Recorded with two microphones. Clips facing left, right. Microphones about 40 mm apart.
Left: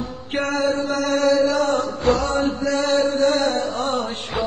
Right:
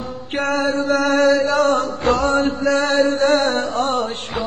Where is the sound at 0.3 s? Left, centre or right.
Right.